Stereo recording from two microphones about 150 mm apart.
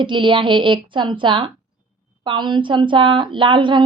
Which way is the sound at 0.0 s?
35° right (ahead or behind).